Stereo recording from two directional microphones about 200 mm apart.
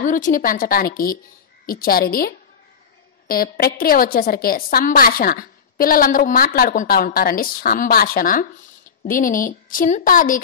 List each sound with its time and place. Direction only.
0.0 s a woman's voice: 40° left (ahead or behind)